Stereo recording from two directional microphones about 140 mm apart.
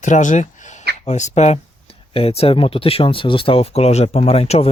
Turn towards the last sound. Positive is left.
turn(degrees=45)  # may be behind; listen again after turning